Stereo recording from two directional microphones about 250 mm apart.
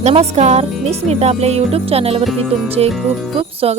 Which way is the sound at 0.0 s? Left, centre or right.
Right.